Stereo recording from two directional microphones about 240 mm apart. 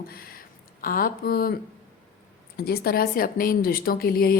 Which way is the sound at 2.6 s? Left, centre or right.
Left.